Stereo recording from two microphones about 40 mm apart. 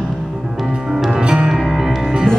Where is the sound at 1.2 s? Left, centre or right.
Right.